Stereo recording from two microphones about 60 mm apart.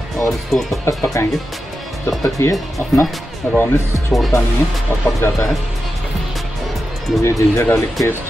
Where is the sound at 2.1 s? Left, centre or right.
Left.